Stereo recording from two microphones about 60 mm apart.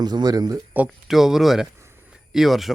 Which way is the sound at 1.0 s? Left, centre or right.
Centre.